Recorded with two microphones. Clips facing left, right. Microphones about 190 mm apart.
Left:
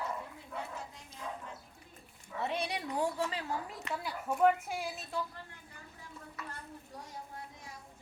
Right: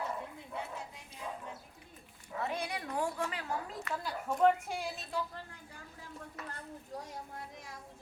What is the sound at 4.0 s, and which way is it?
A woman's voice, 10° left (ahead or behind).